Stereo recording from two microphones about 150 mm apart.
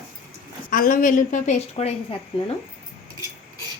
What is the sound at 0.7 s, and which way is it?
A woman's voice, 65° left (ahead or behind).